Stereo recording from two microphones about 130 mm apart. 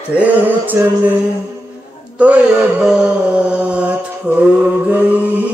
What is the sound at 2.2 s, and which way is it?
Mantra, 10° right (ahead or behind).